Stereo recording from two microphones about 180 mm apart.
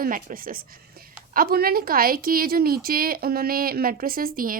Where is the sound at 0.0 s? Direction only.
50° right (ahead or behind).